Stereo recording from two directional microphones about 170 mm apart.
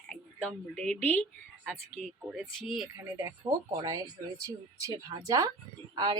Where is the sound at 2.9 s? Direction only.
15° right (ahead or behind).